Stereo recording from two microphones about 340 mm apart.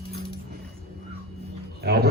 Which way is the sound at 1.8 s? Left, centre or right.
Right.